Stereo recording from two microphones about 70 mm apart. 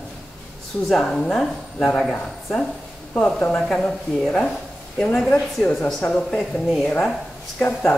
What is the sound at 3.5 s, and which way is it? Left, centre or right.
A woman's voice, centre.